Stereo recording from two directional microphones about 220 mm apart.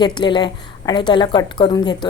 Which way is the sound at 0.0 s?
20° left (ahead or behind).